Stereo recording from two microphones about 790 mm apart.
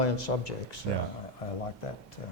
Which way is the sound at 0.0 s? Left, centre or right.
Left.